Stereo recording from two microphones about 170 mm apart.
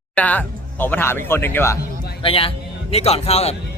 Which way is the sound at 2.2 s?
35° left (ahead or behind).